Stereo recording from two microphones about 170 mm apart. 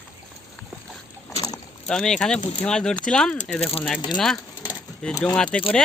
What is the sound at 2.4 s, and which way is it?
Speech, 45° left (ahead or behind).